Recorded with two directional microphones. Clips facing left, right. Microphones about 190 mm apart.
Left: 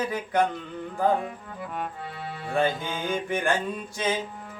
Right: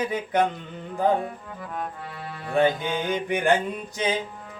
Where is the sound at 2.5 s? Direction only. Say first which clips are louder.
Right 4 dB; 15° right (ahead or behind).